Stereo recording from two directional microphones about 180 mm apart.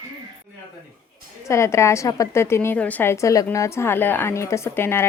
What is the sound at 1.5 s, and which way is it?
A woman's voice, 15° left (ahead or behind).